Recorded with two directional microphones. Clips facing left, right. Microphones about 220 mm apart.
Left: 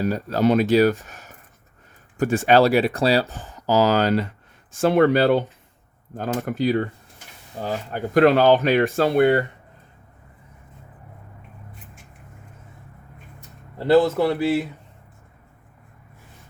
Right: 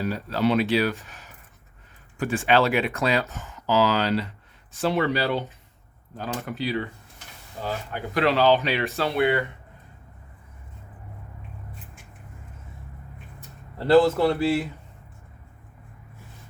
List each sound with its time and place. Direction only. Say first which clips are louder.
0.0 s speech: left 4 dB; 45° left (ahead or behind)
1.0 s a sound: left 3 dB; 45° left (ahead or behind)
2.1 s speech: left 5 dB; 45° left (ahead or behind)
13.7 s speech: left 1 dB; 15° left (ahead or behind)